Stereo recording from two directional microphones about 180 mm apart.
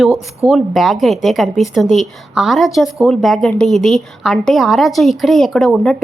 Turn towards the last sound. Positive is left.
turn(degrees=0)  # may be behind; listen again after turning